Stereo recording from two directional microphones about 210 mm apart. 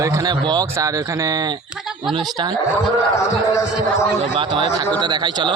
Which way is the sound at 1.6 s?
5° right (ahead or behind).